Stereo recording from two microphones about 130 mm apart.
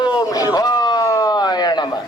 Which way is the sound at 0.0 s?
30° left (ahead or behind).